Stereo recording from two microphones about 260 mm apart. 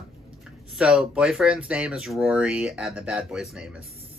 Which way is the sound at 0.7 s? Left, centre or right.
Centre.